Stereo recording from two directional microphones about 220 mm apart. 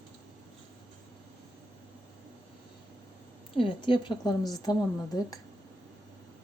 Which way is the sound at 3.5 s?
25° left (ahead or behind).